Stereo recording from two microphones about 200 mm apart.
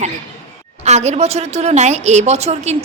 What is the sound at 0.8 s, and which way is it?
A woman's voice, 35° right (ahead or behind).